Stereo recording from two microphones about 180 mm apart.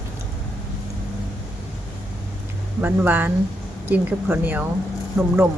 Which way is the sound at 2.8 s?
10° right (ahead or behind).